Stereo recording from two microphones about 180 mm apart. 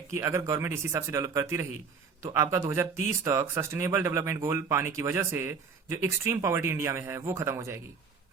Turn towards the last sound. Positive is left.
turn(degrees=-15)  # may be behind; listen again after turning